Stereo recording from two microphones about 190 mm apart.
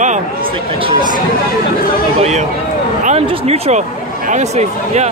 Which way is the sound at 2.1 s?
35° right (ahead or behind).